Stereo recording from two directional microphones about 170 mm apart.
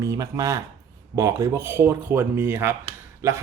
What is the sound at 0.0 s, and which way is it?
Speech, 20° right (ahead or behind).